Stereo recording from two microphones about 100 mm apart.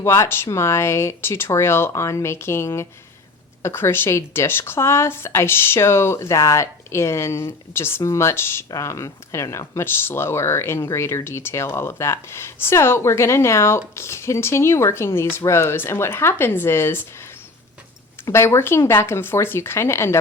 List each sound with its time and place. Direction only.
0.0 s speech: 25° left (ahead or behind)
18.3 s speech: 25° left (ahead or behind)